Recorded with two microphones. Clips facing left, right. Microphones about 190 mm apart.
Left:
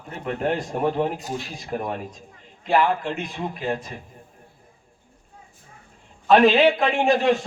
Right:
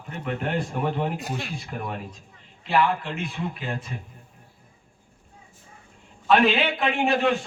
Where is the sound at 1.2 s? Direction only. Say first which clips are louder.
Left 1 dB; 60° right (ahead or behind).